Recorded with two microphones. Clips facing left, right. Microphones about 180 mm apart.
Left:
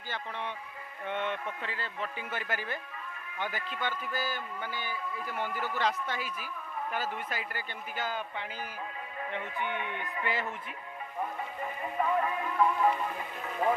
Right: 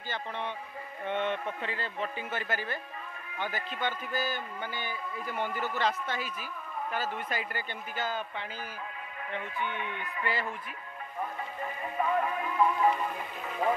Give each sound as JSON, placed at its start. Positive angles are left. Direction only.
{"t": 1.0, "sound": "music", "side_deg": 5}
{"t": 2.3, "sound": "speech", "side_deg": 10}
{"t": 4.1, "sound": "speech", "side_deg": 5}
{"t": 11.6, "sound": "music", "side_deg": 0}